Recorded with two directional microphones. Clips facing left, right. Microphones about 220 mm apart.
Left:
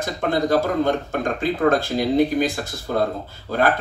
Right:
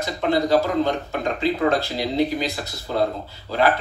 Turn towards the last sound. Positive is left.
turn(degrees=50)  # may be behind; listen again after turning